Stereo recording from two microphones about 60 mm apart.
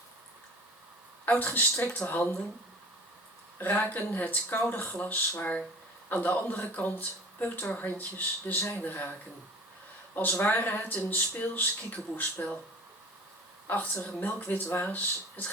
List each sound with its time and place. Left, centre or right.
1.3 s speech: left
3.6 s speech: left
10.4 s speech: left
13.7 s speech: left